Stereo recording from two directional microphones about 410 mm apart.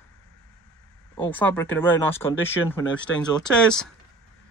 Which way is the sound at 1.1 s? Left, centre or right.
Centre.